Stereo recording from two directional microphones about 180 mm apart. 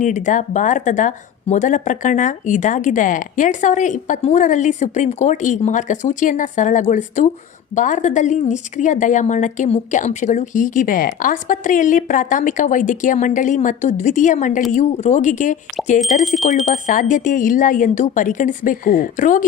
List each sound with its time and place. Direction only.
0.0 s speech: 45° left (ahead or behind)
16.2 s speech: centre (ahead or behind)
16.7 s speech: 45° left (ahead or behind)